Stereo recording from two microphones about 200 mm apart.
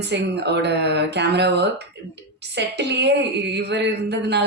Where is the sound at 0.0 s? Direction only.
60° right (ahead or behind).